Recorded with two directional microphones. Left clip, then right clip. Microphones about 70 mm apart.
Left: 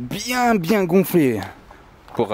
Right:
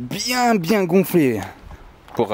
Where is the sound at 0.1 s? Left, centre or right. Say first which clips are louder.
Right 1 dB; centre.